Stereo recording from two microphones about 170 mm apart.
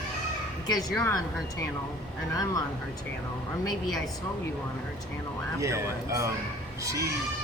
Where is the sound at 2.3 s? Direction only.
20° left (ahead or behind).